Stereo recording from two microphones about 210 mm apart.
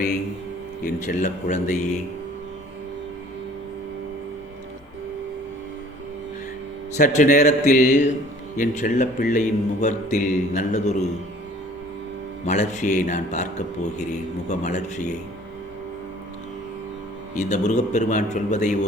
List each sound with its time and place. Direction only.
1.0 s a man's voice: 35° left (ahead or behind)
6.9 s a man's voice: 35° left (ahead or behind)
12.5 s a man's voice: 35° left (ahead or behind)
17.3 s a man's voice: 35° left (ahead or behind)